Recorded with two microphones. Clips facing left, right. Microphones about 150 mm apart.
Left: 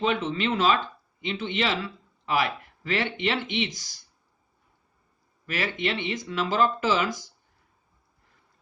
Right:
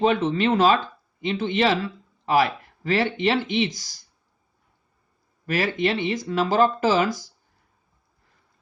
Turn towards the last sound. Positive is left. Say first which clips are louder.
# right 4 dB
turn(degrees=-35)  # may be behind; listen again after turning